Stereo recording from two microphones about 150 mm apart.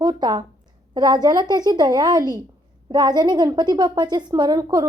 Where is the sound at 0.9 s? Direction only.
30° right (ahead or behind).